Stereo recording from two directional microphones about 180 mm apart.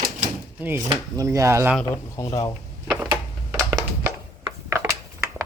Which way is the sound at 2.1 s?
20° left (ahead or behind).